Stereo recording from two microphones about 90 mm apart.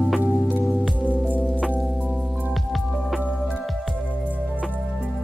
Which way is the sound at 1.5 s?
10° right (ahead or behind).